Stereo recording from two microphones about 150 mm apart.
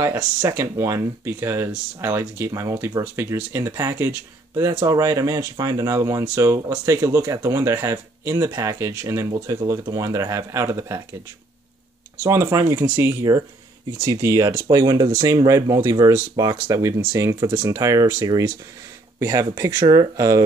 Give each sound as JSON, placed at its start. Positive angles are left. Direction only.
{"t": 0.0, "sound": "speech", "side_deg": -20}
{"t": 12.2, "sound": "speech", "side_deg": -15}